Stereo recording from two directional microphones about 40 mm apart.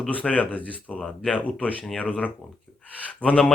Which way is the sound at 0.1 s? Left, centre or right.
Left.